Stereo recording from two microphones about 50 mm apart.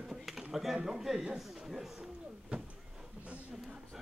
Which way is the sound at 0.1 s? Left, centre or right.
Centre.